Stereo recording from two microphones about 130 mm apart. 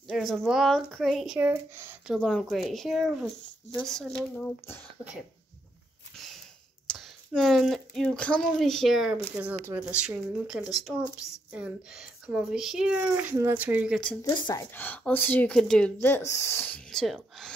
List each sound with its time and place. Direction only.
0.1 s speech: centre (ahead or behind); by 2.0 s 15° right (ahead or behind)
2.1 s speech: 5° left (ahead or behind)
6.9 s speech: 5° left (ahead or behind); by 13.9 s 10° right (ahead or behind)
14.2 s speech: 30° left (ahead or behind)
14.7 s speech: 15° left (ahead or behind)
16.0 s speech: 20° left (ahead or behind); by 17.6 s 5° left (ahead or behind)